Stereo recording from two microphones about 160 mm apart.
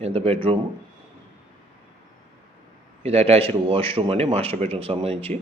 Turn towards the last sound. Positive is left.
turn(degrees=-35)  # may be behind; listen again after turning